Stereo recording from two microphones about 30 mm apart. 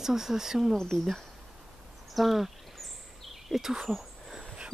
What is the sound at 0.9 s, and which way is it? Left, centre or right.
Speech, centre.